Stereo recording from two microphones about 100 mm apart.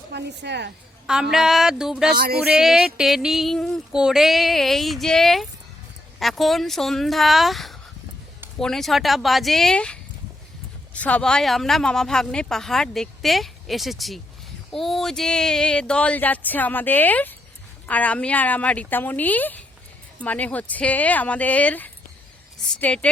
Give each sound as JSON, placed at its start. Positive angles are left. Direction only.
{"t": 1.0, "sound": "a woman's voice", "side_deg": -5}